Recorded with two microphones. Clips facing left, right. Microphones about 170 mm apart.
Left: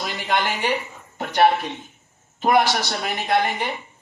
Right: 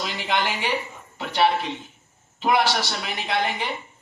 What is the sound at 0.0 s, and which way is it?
A man's voice, 45° left (ahead or behind).